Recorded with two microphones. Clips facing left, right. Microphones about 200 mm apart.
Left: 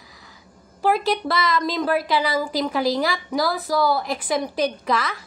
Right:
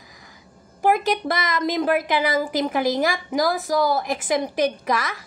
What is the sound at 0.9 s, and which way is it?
Speech, 50° right (ahead or behind).